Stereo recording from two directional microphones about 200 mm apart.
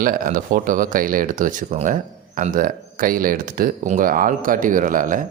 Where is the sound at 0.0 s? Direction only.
45° right (ahead or behind).